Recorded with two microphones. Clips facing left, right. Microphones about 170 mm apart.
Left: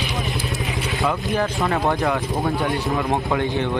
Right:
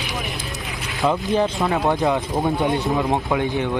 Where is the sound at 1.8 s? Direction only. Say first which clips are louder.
Right 1 dB; 15° right (ahead or behind).